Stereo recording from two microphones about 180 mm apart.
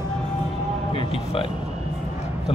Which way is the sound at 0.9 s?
30° left (ahead or behind).